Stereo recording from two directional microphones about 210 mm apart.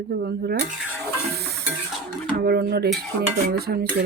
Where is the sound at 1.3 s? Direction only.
50° right (ahead or behind).